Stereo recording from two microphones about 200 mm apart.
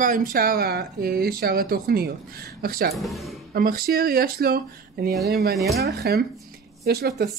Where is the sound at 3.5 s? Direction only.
45° right (ahead or behind).